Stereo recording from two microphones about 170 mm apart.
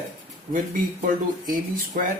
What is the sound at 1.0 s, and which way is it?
Speech, 55° right (ahead or behind).